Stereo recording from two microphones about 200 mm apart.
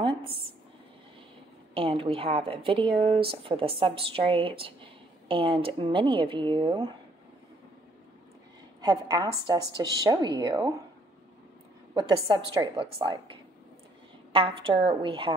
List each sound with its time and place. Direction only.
1.7 s a woman's voice: 25° right (ahead or behind)
8.8 s a woman's voice: 15° right (ahead or behind)
12.5 s a woman's voice: 25° right (ahead or behind)